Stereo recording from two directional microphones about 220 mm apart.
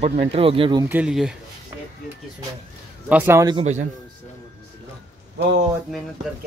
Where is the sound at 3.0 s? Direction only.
10° right (ahead or behind).